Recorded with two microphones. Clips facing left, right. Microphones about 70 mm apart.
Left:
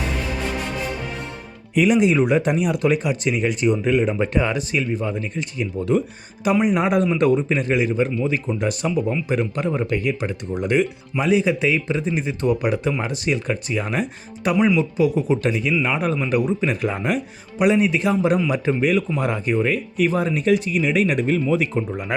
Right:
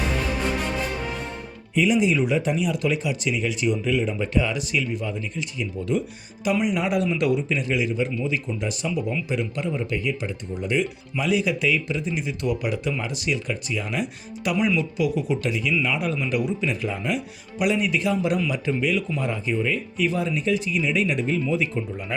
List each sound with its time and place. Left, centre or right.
1.7 s a man's voice: left
11.2 s a man's voice: left
16.8 s a man's voice: left